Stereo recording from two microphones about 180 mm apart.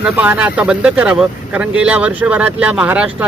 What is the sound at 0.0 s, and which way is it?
Speech, 10° right (ahead or behind).